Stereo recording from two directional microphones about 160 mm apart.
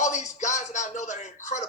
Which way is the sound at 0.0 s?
50° left (ahead or behind).